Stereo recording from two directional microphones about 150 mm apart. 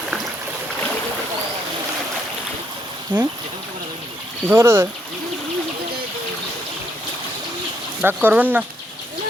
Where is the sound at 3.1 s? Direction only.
30° right (ahead or behind).